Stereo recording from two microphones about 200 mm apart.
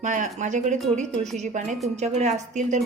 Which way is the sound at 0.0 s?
40° right (ahead or behind).